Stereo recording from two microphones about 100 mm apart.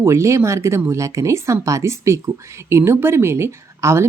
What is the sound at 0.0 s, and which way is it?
Speech, 30° right (ahead or behind).